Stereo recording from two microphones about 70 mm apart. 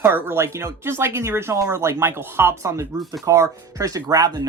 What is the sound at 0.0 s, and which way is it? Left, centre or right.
Speech, right.